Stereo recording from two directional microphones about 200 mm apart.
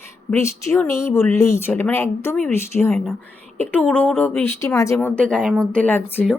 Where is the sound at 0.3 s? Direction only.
15° left (ahead or behind).